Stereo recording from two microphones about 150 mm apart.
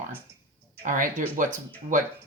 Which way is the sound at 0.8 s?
65° right (ahead or behind).